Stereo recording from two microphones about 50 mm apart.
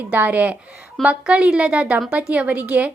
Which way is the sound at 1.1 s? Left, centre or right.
Right.